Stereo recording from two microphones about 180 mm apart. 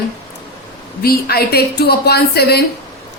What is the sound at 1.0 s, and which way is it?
A woman's voice, 60° left (ahead or behind).